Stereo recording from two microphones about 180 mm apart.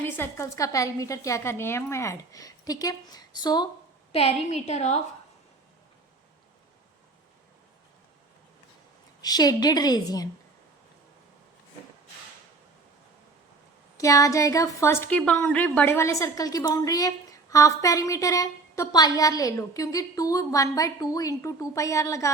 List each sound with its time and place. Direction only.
0.0 s a woman's voice: 15° left (ahead or behind)
4.1 s a woman's voice: 35° left (ahead or behind)
9.2 s a woman's voice: 20° left (ahead or behind)
13.9 s a woman's voice: 20° left (ahead or behind)